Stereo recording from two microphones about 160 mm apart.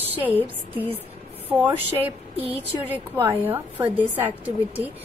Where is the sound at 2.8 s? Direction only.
10° right (ahead or behind).